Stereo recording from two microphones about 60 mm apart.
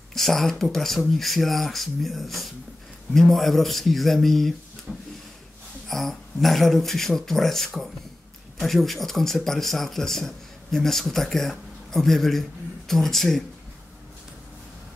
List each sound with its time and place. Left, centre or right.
0.1 s speech: centre
4.9 s speech: centre
5.9 s speech: centre